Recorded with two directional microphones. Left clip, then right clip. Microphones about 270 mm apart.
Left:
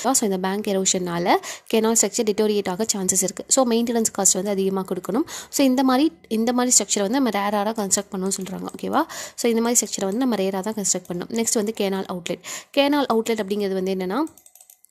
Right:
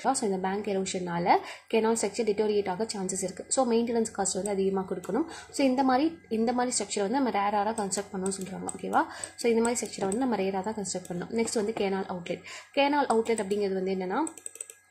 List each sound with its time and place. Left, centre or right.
0.0 s a woman's voice: left